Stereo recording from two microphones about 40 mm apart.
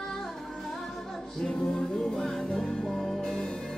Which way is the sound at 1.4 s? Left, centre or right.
Centre.